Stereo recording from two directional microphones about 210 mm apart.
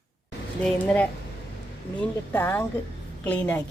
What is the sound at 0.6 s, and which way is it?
A woman's voice, 5° left (ahead or behind).